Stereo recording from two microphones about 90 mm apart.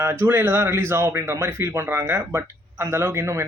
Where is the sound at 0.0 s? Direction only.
25° right (ahead or behind).